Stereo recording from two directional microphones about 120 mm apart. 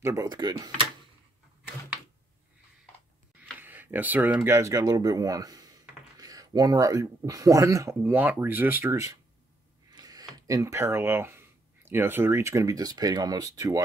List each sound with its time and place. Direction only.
0.0 s speech: 30° right (ahead or behind)
3.5 s speech: 15° right (ahead or behind)
8.0 s speech: 15° right (ahead or behind); by 13.5 s 35° right (ahead or behind)